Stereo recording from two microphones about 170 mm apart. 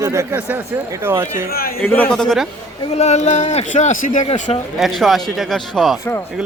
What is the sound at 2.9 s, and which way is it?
Speech, 40° left (ahead or behind).